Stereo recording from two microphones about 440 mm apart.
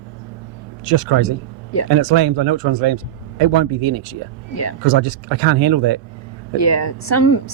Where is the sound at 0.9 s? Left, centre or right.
Right.